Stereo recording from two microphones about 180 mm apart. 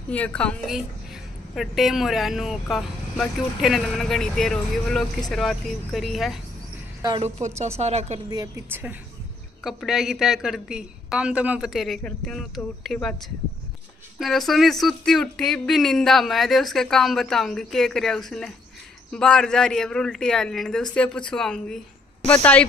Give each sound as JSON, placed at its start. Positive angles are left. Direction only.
{"t": 0.1, "sound": "speech", "side_deg": 5}
{"t": 7.0, "sound": "speech", "side_deg": -25}
{"t": 7.6, "sound": "a woman's voice", "side_deg": -35}
{"t": 8.3, "sound": "a woman's voice", "side_deg": -15}
{"t": 9.6, "sound": "speech", "side_deg": 0}
{"t": 14.2, "sound": "speech", "side_deg": 0}